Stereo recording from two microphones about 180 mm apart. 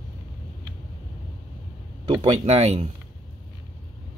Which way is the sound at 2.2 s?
35° right (ahead or behind).